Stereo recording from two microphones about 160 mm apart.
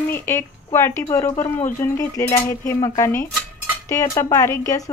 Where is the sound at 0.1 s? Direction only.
15° left (ahead or behind).